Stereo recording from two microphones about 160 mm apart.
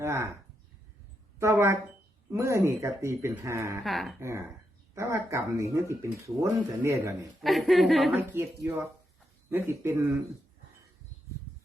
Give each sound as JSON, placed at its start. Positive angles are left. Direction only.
{"t": 0.0, "sound": "speech", "side_deg": -20}
{"t": 1.4, "sound": "a woman's voice", "side_deg": -15}
{"t": 3.8, "sound": "a woman's voice", "side_deg": 0}
{"t": 4.2, "sound": "a woman's voice", "side_deg": -15}
{"t": 7.4, "sound": "a woman's voice", "side_deg": 0}
{"t": 8.1, "sound": "a woman's voice", "side_deg": -15}
{"t": 9.5, "sound": "a woman's voice", "side_deg": -15}